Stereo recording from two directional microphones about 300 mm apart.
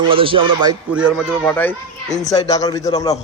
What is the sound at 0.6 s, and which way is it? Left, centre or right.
A man's voice, centre.